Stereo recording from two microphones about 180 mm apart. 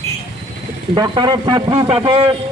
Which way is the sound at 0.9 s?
25° right (ahead or behind).